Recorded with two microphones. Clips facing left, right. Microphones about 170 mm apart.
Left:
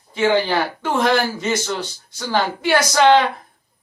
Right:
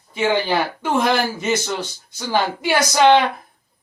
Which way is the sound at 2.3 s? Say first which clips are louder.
Left 1 dB; 15° right (ahead or behind).